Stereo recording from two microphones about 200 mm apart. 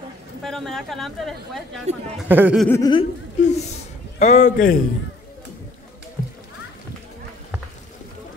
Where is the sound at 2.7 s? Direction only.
20° left (ahead or behind).